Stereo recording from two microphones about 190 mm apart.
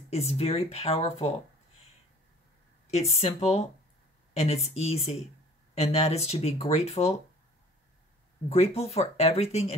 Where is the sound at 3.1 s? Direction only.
35° left (ahead or behind).